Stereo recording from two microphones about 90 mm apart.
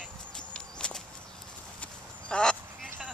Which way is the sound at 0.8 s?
10° left (ahead or behind).